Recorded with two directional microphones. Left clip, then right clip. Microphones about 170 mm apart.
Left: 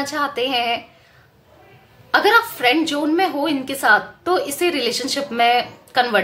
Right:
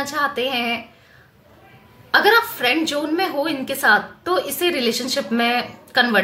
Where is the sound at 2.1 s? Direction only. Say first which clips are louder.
Even; 25° left (ahead or behind).